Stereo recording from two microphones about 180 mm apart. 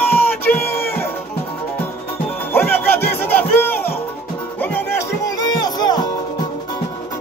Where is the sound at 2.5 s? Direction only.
10° left (ahead or behind).